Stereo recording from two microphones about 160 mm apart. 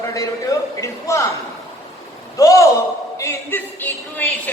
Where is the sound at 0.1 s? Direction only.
20° left (ahead or behind).